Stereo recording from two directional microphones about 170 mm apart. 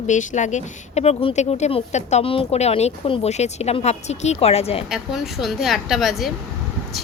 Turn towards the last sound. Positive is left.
turn(degrees=0)  # may be behind; listen again after turning